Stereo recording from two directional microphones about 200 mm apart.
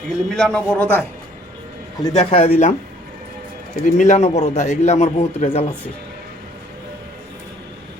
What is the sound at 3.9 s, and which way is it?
A man's voice, 40° left (ahead or behind).